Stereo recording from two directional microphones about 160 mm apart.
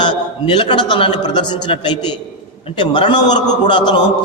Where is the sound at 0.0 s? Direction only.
30° left (ahead or behind).